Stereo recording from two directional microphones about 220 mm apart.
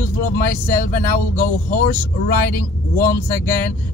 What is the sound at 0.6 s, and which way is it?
Speech, 40° left (ahead or behind).